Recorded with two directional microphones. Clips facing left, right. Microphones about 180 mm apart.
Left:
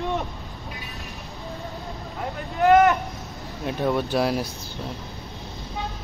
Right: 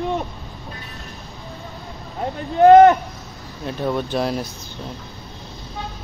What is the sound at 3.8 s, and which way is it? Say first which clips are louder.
Speech: even; 10° left (ahead or behind).